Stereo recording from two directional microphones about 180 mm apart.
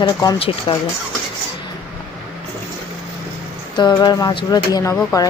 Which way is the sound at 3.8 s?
25° left (ahead or behind).